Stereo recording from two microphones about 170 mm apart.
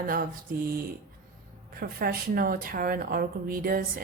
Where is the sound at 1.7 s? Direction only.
60° right (ahead or behind).